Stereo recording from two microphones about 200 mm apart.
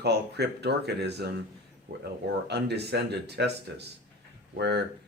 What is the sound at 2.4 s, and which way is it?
Speech, 55° right (ahead or behind).